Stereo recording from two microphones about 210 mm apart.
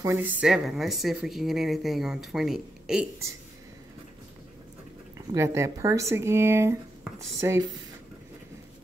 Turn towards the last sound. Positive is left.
turn(degrees=-15)  # may be behind; listen again after turning